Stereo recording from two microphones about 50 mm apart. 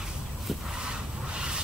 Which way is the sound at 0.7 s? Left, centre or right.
Centre.